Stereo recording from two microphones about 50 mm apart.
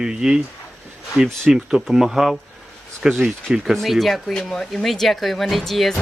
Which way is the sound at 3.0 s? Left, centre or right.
Centre.